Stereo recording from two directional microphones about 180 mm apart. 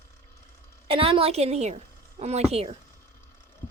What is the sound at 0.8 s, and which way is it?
A woman's voice, 30° right (ahead or behind).